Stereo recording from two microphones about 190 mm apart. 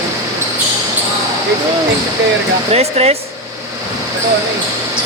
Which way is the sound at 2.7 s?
35° right (ahead or behind).